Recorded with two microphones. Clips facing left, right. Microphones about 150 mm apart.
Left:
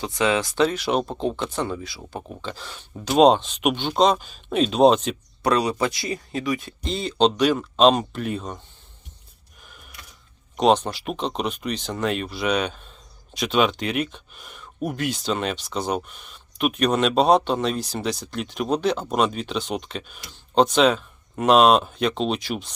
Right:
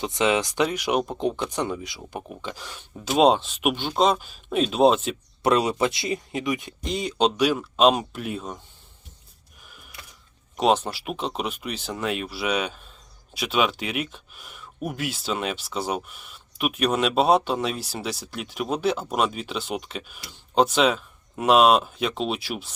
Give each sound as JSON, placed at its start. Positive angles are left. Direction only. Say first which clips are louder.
{"t": 0.0, "sound": "speech", "louder": "even", "side_deg": -20}
{"t": 5.4, "sound": "speech", "louder": "even", "side_deg": -25}
{"t": 10.6, "sound": "speech", "louder": "left 3 dB", "side_deg": -5}